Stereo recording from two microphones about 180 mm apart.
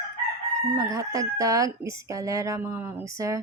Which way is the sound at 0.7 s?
20° right (ahead or behind).